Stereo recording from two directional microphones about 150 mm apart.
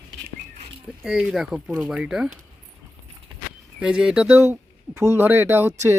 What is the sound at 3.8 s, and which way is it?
Speech, 5° right (ahead or behind).